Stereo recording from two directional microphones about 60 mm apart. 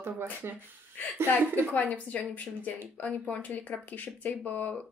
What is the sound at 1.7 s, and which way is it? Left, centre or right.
A woman's voice, left.